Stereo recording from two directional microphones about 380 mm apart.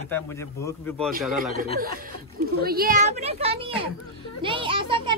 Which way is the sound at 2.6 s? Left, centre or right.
Right.